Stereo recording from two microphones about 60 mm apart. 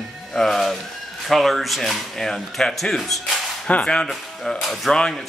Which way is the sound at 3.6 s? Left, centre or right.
Centre.